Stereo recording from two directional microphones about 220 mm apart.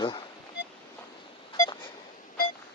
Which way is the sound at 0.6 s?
50° left (ahead or behind).